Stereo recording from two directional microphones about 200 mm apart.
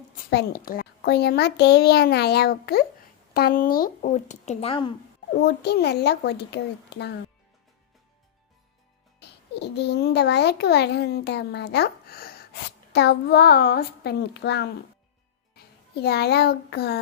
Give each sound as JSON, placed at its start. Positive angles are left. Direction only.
{"t": 0.3, "sound": "a child's voice", "side_deg": 55}
{"t": 5.3, "sound": "a child's voice", "side_deg": 55}
{"t": 9.2, "sound": "a child's voice", "side_deg": 55}
{"t": 16.0, "sound": "a child's voice", "side_deg": 55}